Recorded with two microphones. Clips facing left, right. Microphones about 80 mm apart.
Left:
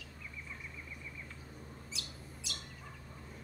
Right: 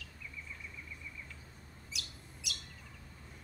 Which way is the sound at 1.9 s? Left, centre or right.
Left.